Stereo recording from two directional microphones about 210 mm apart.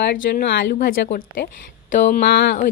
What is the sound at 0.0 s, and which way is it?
Speech, 50° left (ahead or behind).